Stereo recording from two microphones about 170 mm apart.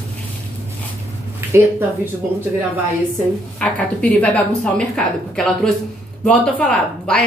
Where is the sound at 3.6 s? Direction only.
5° left (ahead or behind).